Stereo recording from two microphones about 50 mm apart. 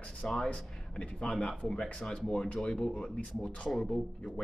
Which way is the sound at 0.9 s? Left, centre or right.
Centre.